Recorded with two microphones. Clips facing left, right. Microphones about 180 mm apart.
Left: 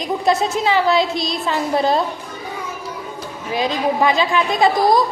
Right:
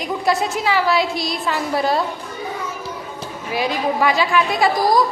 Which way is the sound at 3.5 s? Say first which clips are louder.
Left 1 dB; 20° left (ahead or behind).